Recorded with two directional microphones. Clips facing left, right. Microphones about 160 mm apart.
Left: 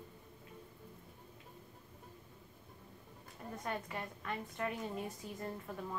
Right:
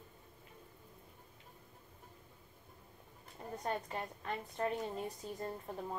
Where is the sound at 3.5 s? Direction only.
35° right (ahead or behind).